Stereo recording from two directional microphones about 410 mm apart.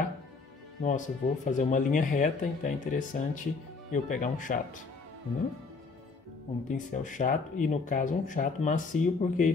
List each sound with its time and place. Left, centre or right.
0.8 s speech: centre
6.7 s speech: centre